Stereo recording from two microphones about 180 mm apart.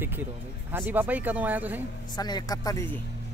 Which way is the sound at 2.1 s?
20° left (ahead or behind).